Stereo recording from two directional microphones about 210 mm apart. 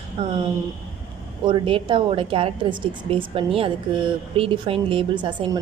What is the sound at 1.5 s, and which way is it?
A woman's voice, 25° right (ahead or behind).